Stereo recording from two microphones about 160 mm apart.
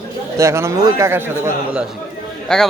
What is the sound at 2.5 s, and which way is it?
Speech, 5° left (ahead or behind).